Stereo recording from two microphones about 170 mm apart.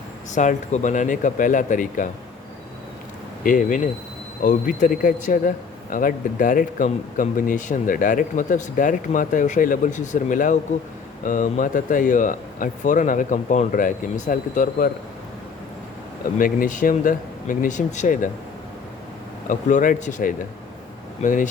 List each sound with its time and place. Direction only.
0.3 s a man's voice: 45° left (ahead or behind)
3.4 s a man's voice: 50° left (ahead or behind)
16.4 s a man's voice: 50° left (ahead or behind)
19.5 s a man's voice: 50° left (ahead or behind)